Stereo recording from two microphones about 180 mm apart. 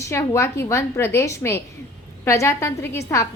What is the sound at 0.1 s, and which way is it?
A woman's voice, 15° left (ahead or behind).